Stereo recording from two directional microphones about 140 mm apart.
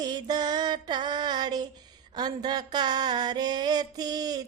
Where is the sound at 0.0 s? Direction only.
30° right (ahead or behind).